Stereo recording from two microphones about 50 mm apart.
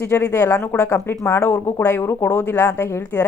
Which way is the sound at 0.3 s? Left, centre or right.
Left.